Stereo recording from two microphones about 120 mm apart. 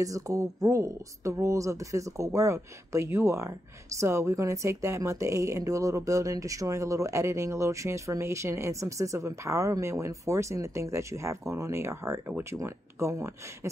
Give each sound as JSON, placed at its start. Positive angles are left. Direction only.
{"t": 0.0, "sound": "speech", "side_deg": -30}